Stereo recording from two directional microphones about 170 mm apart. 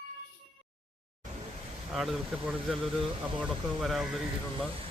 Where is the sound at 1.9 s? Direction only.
Centre (ahead or behind).